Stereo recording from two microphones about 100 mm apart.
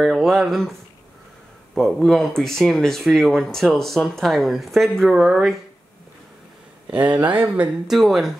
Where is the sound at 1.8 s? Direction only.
5° left (ahead or behind).